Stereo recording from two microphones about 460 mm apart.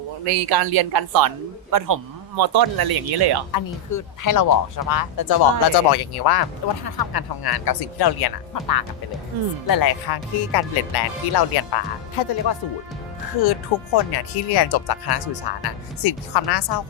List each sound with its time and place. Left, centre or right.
0.3 s speech: right
3.5 s speech: left
13.4 s speech: left